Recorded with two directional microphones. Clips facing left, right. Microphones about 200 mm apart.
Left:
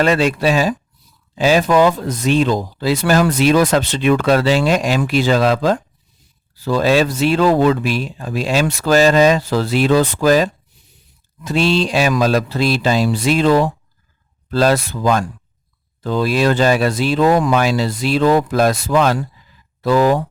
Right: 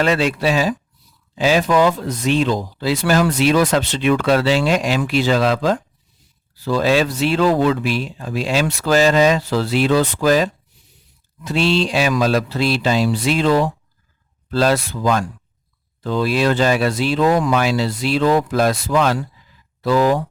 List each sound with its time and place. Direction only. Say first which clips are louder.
0.0 s speech: left 2 dB; 45° left (ahead or behind)